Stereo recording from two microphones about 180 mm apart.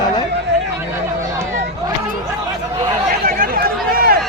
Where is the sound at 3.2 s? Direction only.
55° right (ahead or behind).